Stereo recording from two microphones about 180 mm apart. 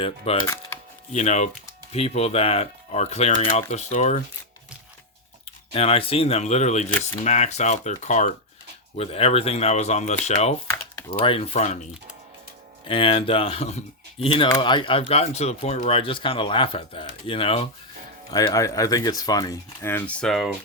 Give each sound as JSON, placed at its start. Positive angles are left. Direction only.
{"t": 0.3, "sound": "speech", "side_deg": 35}
{"t": 5.7, "sound": "speech", "side_deg": 30}
{"t": 12.9, "sound": "speech", "side_deg": 30}
{"t": 18.3, "sound": "speech", "side_deg": 20}